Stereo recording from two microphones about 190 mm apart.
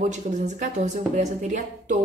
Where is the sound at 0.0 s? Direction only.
40° right (ahead or behind).